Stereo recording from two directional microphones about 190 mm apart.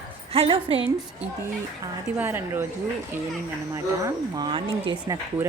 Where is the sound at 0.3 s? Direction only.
30° right (ahead or behind).